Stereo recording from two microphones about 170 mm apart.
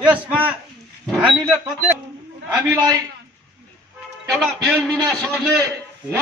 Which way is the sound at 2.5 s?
20° right (ahead or behind).